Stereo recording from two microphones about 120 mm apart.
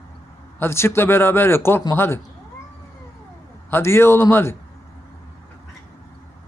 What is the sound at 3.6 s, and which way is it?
Speech, 20° left (ahead or behind).